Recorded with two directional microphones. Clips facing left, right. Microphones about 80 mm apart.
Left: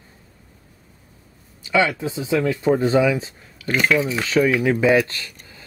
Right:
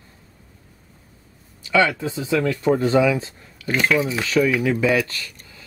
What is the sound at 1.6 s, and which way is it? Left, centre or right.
Speech, centre.